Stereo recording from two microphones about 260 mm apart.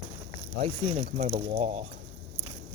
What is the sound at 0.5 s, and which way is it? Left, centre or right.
Speech, right.